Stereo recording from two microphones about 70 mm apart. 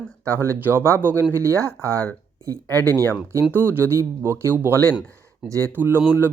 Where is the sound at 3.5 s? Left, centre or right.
Right.